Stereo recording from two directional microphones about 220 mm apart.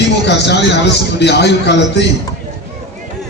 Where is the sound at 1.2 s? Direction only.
50° left (ahead or behind).